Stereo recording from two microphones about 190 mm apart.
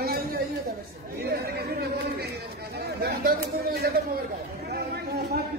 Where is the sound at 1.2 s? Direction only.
55° right (ahead or behind).